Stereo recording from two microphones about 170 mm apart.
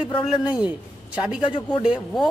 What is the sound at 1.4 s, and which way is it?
Speech, 30° left (ahead or behind).